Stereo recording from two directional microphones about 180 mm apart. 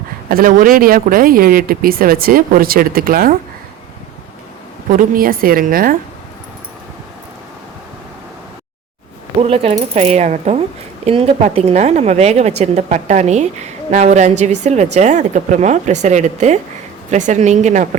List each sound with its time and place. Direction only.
0.3 s speech: 50° right (ahead or behind)
4.9 s speech: 50° right (ahead or behind)
9.4 s a woman's voice: 30° right (ahead or behind)